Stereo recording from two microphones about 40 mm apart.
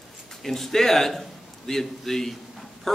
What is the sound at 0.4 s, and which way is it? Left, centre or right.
A man's voice, centre.